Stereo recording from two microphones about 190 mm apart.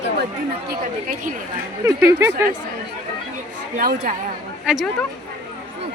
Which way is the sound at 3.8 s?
50° right (ahead or behind).